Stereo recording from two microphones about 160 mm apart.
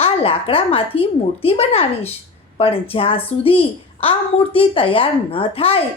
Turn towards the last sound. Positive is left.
turn(degrees=35)  # may be behind; listen again after turning